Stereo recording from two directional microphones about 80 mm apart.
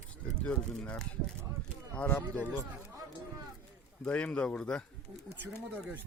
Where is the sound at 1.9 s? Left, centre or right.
Left.